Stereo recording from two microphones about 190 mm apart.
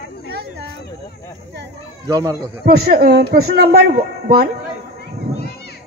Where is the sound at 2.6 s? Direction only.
55° right (ahead or behind).